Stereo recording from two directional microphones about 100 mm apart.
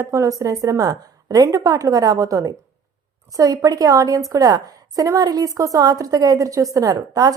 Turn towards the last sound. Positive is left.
turn(degrees=-35)  # may be behind; listen again after turning